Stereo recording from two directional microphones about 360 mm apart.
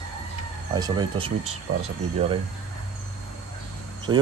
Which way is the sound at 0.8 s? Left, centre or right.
Centre.